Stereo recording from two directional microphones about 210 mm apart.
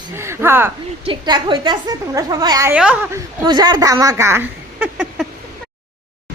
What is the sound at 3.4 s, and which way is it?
Speech, 20° right (ahead or behind).